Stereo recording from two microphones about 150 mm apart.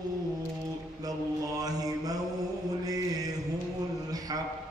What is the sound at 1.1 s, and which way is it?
Mantra, 25° right (ahead or behind).